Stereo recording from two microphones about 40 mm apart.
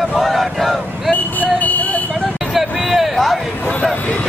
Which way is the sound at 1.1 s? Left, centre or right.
Left.